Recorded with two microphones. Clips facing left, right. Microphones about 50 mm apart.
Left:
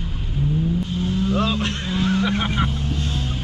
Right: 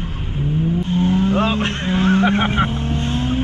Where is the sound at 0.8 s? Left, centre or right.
Right.